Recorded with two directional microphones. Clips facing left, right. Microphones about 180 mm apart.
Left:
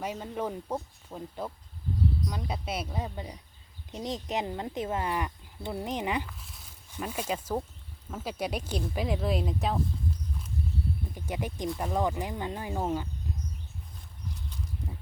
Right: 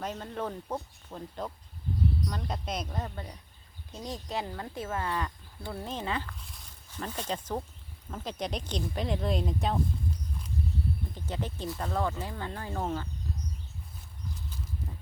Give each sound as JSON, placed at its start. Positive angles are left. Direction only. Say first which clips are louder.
{"t": 0.0, "sound": "speech", "louder": "left 2 dB", "side_deg": 10}
{"t": 11.1, "sound": "speech", "louder": "left 1 dB", "side_deg": 10}